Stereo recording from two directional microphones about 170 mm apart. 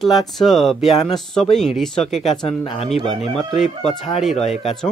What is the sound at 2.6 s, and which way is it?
Speech, 35° left (ahead or behind).